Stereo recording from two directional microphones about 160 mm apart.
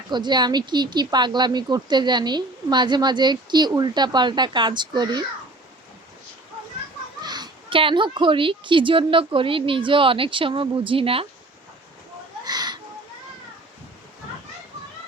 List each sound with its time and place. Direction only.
0.1 s speech: 25° right (ahead or behind)
7.2 s a child's voice: 25° right (ahead or behind)
12.5 s a sound: 25° right (ahead or behind)